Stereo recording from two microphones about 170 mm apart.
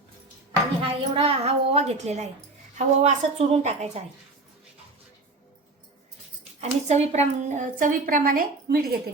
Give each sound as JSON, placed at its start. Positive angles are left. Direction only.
{"t": 0.8, "sound": "a woman's voice", "side_deg": -35}
{"t": 6.6, "sound": "a woman's voice", "side_deg": -40}